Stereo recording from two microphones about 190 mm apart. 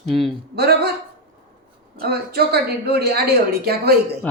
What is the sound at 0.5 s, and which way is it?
Speech, 60° right (ahead or behind).